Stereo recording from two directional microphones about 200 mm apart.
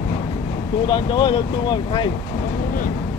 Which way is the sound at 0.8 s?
20° left (ahead or behind).